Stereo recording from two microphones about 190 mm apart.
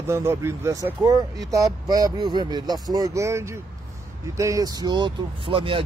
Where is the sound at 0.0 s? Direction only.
15° right (ahead or behind).